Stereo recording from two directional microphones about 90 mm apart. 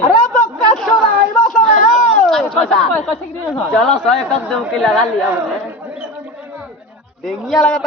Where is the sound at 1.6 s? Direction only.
5° left (ahead or behind).